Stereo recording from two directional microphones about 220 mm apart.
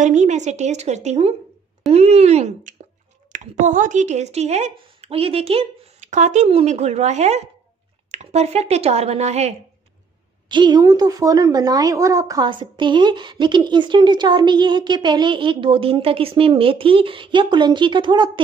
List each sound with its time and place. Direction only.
0.0 s a woman's voice: 30° right (ahead or behind)